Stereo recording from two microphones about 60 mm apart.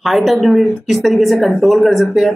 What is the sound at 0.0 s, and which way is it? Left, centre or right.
Speech, centre.